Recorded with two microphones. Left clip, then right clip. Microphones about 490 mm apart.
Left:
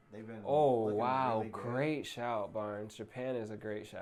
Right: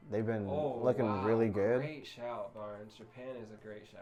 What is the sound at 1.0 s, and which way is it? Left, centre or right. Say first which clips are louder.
Speech: right 1 dB; left.